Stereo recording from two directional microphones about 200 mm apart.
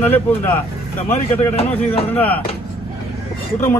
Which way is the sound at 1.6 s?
30° left (ahead or behind).